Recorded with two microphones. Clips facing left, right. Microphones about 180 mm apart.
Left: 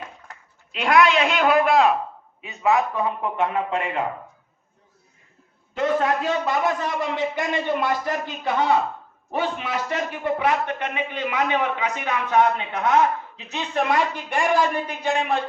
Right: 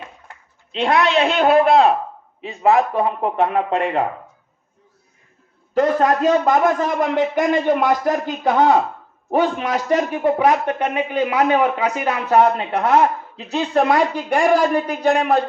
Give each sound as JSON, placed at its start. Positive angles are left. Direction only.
{"t": 0.7, "sound": "speech", "side_deg": -30}
{"t": 5.7, "sound": "a man's voice", "side_deg": -40}